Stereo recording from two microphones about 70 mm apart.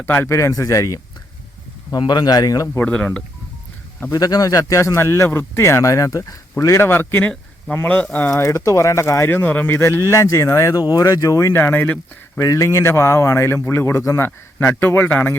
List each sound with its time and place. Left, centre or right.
0.0 s speech: left
1.9 s speech: left
2.8 s speech: centre
4.1 s speech: left
6.7 s speech: left
8.4 s speech: left
9.3 s speech: left
9.7 s speech: left
11.1 s speech: left
11.5 s speech: left
12.4 s speech: left